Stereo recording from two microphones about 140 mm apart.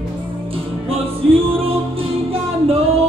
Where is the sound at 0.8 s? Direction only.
40° right (ahead or behind).